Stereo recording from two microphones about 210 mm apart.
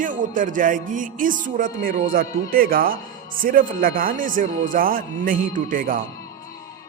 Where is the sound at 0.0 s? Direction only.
40° right (ahead or behind).